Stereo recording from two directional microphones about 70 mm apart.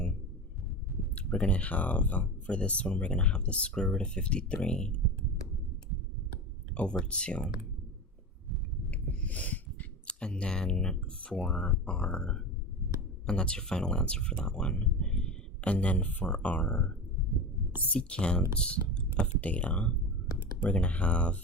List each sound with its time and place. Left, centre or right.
1.1 s speech: centre
6.7 s speech: centre
8.9 s a sound: left
13.2 s speech: centre
17.9 s speech: centre